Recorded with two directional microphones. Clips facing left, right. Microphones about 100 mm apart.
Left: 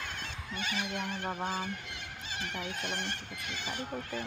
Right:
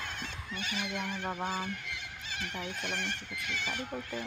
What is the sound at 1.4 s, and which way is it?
Insect, 25° left (ahead or behind).